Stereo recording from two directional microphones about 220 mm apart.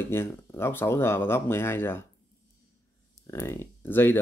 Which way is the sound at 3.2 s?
10° left (ahead or behind).